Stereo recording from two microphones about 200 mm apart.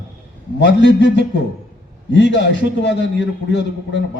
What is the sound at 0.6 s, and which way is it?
A man's voice, 60° left (ahead or behind).